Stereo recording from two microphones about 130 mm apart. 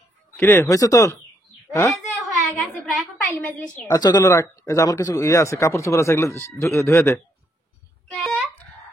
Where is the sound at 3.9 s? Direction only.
30° left (ahead or behind).